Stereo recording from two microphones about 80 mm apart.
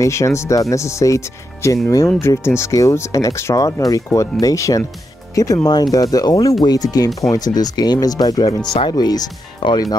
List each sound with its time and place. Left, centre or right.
0.0 s speech: left